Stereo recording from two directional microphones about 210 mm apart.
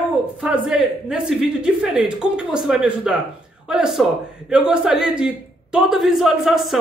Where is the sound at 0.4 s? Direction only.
Centre (ahead or behind).